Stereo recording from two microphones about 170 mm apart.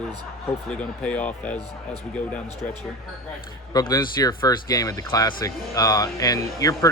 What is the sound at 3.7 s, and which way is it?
Speech, 25° left (ahead or behind).